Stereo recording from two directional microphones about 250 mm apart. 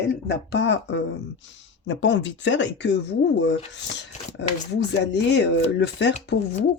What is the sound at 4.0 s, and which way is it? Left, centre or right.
Speech, left.